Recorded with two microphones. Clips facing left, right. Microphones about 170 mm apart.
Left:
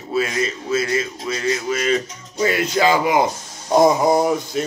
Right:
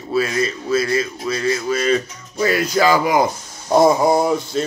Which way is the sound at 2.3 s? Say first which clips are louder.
Right 1 dB; 20° left (ahead or behind).